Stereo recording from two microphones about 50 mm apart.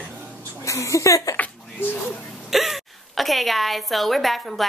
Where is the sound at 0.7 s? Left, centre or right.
Left.